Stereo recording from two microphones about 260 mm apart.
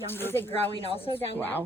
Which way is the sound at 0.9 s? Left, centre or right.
Left.